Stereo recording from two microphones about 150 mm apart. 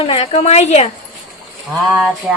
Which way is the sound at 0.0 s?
40° left (ahead or behind).